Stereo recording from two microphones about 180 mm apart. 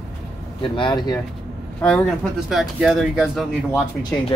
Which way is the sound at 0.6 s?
25° left (ahead or behind).